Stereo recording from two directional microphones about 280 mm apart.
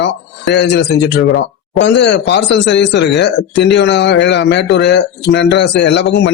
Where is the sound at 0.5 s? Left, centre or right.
Left.